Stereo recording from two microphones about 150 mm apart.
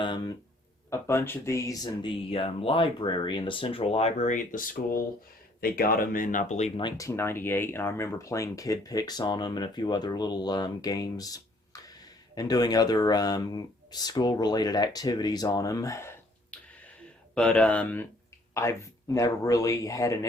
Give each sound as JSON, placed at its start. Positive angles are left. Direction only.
{"t": 0.0, "sound": "speech", "side_deg": 30}
{"t": 0.9, "sound": "speech", "side_deg": 15}
{"t": 5.5, "sound": "speech", "side_deg": 75}
{"t": 6.7, "sound": "speech", "side_deg": 25}
{"t": 17.3, "sound": "speech", "side_deg": 5}